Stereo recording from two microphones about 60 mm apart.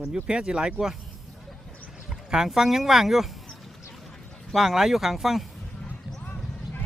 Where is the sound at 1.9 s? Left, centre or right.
Centre.